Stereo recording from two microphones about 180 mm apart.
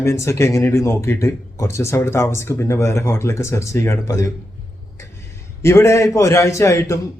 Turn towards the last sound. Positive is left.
turn(degrees=15)  # may be behind; listen again after turning